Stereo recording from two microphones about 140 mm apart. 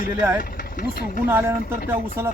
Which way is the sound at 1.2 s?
15° right (ahead or behind).